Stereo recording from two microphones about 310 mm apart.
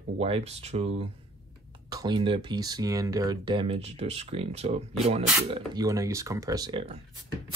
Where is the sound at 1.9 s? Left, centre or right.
Centre.